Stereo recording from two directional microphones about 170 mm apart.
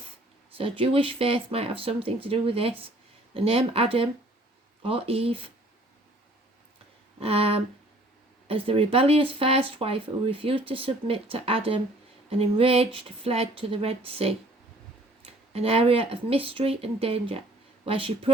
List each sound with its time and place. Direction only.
0.5 s speech: 35° right (ahead or behind)
7.2 s speech: 35° right (ahead or behind)
15.5 s speech: 35° right (ahead or behind)